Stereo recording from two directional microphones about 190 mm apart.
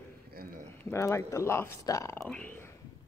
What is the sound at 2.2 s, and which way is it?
Speech, 5° left (ahead or behind).